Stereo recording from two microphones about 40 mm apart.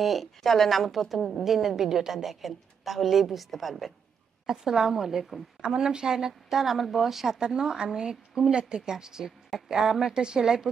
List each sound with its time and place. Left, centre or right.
0.0 s a woman's voice: centre
4.5 s a woman's voice: centre